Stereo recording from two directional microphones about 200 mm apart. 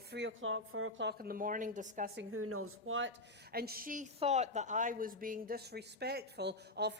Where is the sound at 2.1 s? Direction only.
90° right; by 3.1 s 75° right (ahead or behind).